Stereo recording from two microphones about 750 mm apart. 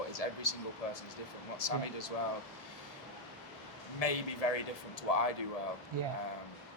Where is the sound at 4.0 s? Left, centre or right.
Left.